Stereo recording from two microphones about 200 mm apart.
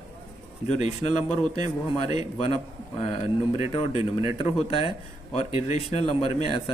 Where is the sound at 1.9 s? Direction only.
30° left (ahead or behind).